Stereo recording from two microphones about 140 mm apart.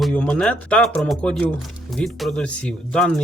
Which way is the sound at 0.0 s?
10° left (ahead or behind).